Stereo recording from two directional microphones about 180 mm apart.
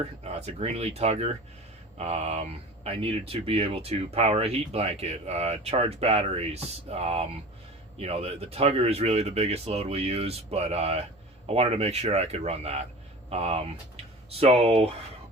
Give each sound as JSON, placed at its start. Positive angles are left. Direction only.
{"t": 0.3, "sound": "speech", "side_deg": -35}